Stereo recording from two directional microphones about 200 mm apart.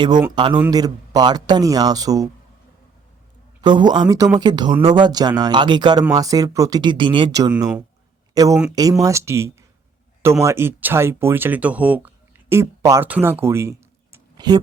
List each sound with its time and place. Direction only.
0.3 s speech: 20° right (ahead or behind)
3.6 s speech: 20° right (ahead or behind)